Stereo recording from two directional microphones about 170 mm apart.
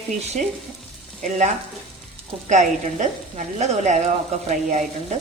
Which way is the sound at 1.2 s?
45° right (ahead or behind).